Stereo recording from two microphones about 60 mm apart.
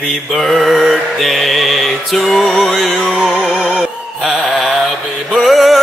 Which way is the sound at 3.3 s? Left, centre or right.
Centre.